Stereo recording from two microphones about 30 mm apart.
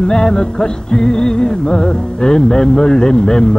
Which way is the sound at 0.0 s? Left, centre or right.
Left.